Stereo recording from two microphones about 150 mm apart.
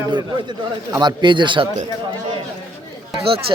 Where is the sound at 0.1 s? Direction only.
30° right (ahead or behind).